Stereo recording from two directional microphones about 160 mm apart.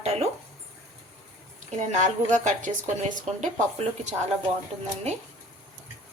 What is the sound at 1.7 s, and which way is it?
Speech, 50° right (ahead or behind).